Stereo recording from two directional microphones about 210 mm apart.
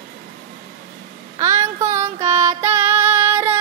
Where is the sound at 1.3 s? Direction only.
15° right (ahead or behind).